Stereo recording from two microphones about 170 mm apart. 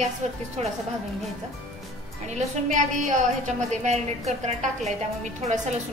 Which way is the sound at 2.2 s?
45° right (ahead or behind).